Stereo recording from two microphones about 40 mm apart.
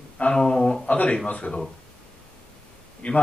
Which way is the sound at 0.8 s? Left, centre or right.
Left.